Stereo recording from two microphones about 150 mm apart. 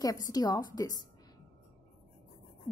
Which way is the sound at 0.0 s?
25° left (ahead or behind).